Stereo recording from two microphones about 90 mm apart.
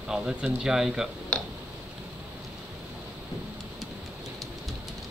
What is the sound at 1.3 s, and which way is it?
Tick-tock, 10° left (ahead or behind).